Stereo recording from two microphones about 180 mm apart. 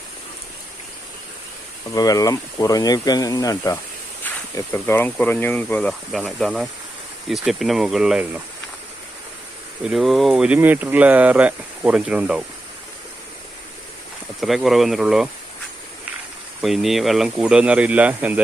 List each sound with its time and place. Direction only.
1.9 s speech: 20° left (ahead or behind); by 8.4 s 5° right (ahead or behind)
9.8 s speech: centre (ahead or behind)
14.4 s speech: centre (ahead or behind)
16.6 s speech: centre (ahead or behind)